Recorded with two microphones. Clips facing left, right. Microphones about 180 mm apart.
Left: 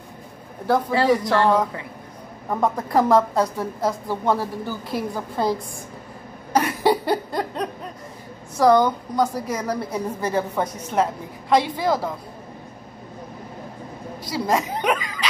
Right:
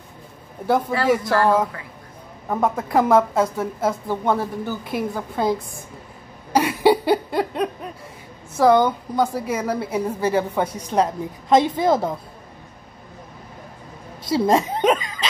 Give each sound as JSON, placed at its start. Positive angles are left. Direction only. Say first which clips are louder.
{"t": 0.7, "sound": "a woman's voice", "louder": "right 1 dB", "side_deg": -5}
{"t": 0.9, "sound": "speech", "louder": "left 3 dB", "side_deg": 25}
{"t": 2.5, "sound": "a woman's voice", "louder": "right 1 dB", "side_deg": -5}
{"t": 6.5, "sound": "cough", "louder": "right 3 dB", "side_deg": -10}
{"t": 8.8, "sound": "a woman's voice", "louder": "right 1 dB", "side_deg": -5}
{"t": 14.2, "sound": "speech", "louder": "right 5 dB", "side_deg": -25}